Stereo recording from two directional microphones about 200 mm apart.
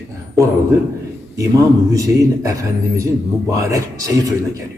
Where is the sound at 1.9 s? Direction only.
15° right (ahead or behind).